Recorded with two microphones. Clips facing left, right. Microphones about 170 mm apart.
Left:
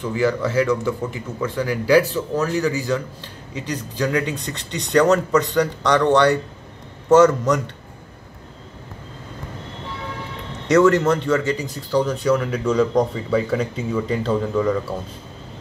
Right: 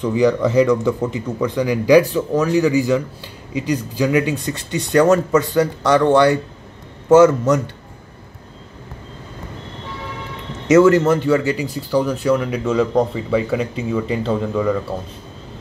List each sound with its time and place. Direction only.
0.0 s speech: 20° right (ahead or behind)
10.7 s speech: 5° right (ahead or behind)